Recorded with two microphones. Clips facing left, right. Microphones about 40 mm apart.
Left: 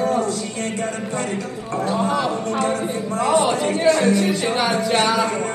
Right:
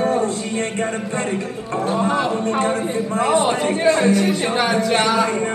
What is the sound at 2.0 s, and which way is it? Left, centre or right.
A man's voice, right.